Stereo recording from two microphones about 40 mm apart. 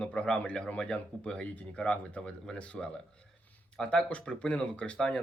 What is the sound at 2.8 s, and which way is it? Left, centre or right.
Speech, centre.